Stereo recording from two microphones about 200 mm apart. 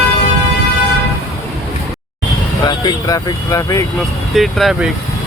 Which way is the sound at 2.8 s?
15° left (ahead or behind).